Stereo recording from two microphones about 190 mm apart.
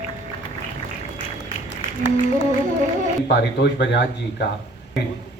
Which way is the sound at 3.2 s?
60° left (ahead or behind).